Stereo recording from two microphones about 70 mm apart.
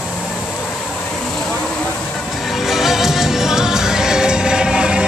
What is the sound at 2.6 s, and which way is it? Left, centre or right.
Music, centre.